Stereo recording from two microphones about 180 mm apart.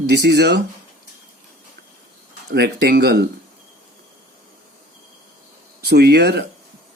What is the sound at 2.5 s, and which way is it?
Speech, 65° right (ahead or behind).